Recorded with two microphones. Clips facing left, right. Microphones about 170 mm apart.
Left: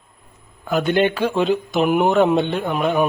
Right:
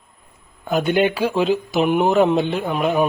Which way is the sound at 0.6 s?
20° right (ahead or behind).